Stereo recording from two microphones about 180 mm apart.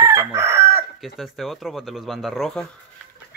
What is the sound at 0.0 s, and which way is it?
Chicken, 15° right (ahead or behind).